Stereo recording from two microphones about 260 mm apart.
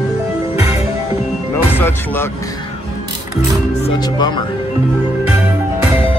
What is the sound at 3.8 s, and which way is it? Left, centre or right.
Speech, centre.